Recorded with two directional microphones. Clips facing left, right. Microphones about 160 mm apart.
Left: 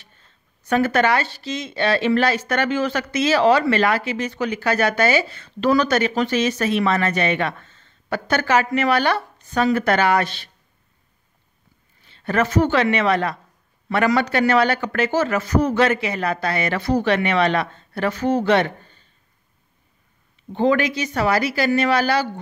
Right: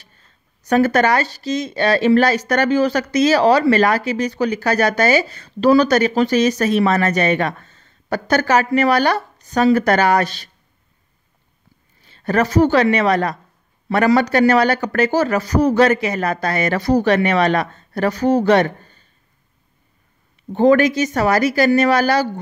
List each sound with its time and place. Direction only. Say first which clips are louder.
0.7 s speech: right 3 dB; 40° right (ahead or behind)
12.1 s speech: right 3 dB; 40° right (ahead or behind)
20.5 s speech: right 6 dB; 45° right (ahead or behind)